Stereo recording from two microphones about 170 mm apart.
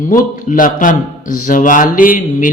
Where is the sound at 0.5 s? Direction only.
50° left (ahead or behind).